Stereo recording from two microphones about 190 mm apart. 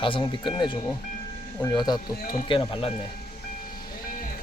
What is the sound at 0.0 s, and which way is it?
Speech, 25° left (ahead or behind).